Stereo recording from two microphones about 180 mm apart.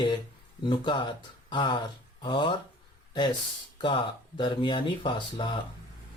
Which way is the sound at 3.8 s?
25° left (ahead or behind).